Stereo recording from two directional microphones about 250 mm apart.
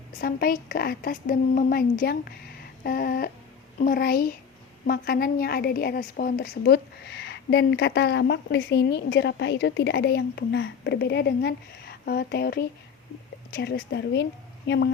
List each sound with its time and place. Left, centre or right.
0.2 s a woman's voice: left